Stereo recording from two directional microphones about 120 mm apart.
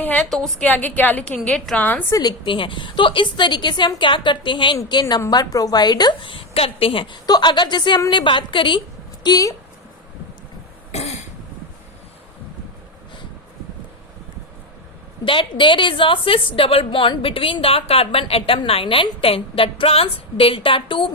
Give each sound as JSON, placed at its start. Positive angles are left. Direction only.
{"t": 0.3, "sound": "a woman's voice", "side_deg": 5}
{"t": 0.7, "sound": "a woman's voice", "side_deg": 15}
{"t": 2.1, "sound": "a woman's voice", "side_deg": 40}
{"t": 9.2, "sound": "a woman's voice", "side_deg": 30}
{"t": 10.9, "sound": "cough", "side_deg": 65}
{"t": 15.2, "sound": "a woman's voice", "side_deg": 45}